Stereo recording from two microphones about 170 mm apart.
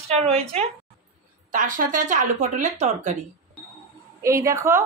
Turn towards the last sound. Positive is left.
turn(degrees=-15)  # may be behind; listen again after turning